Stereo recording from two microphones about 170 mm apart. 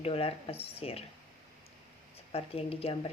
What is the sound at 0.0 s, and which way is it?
Speech, 35° left (ahead or behind).